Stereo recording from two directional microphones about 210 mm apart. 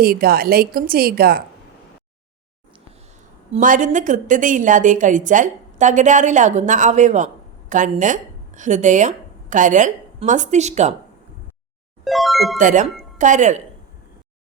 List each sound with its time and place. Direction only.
0.0 s a woman's voice: 45° right (ahead or behind)
3.5 s a woman's voice: 35° right (ahead or behind)
12.0 s speech: centre (ahead or behind)
12.5 s a woman's voice: 35° right (ahead or behind)